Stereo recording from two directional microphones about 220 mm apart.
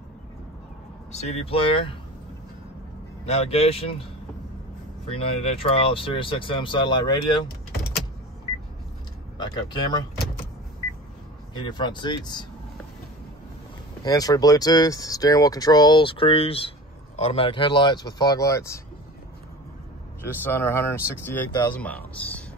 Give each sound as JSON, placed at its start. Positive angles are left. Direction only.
{"t": 1.1, "sound": "speech", "side_deg": 30}
{"t": 3.3, "sound": "speech", "side_deg": 25}
{"t": 5.1, "sound": "speech", "side_deg": 25}
{"t": 9.4, "sound": "speech", "side_deg": 20}
{"t": 11.5, "sound": "speech", "side_deg": 20}
{"t": 14.0, "sound": "speech", "side_deg": 15}
{"t": 20.2, "sound": "speech", "side_deg": 10}